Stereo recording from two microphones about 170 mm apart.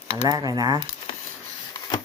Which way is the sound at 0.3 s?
20° right (ahead or behind).